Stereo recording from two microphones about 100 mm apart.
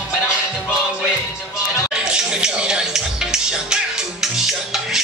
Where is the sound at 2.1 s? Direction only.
10° right (ahead or behind).